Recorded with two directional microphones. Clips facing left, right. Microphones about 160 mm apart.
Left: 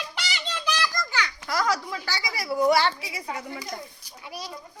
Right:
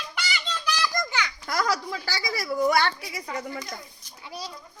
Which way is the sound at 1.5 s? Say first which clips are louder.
Left 1 dB; 35° right (ahead or behind).